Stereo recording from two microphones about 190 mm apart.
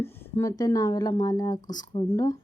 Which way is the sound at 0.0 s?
10° left (ahead or behind).